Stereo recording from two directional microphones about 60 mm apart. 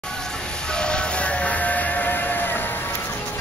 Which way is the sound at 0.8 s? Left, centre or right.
Centre.